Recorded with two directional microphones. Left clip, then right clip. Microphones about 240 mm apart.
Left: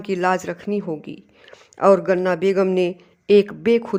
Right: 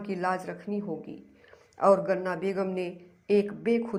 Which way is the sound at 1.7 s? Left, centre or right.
Left.